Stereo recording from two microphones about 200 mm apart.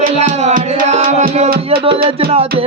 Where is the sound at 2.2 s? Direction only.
30° right (ahead or behind).